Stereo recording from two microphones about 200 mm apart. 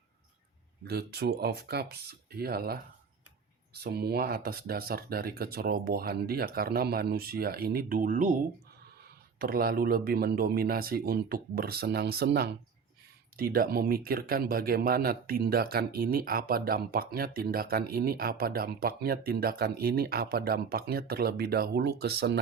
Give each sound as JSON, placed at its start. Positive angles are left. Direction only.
{"t": 0.9, "sound": "speech", "side_deg": -50}
{"t": 9.4, "sound": "speech", "side_deg": -50}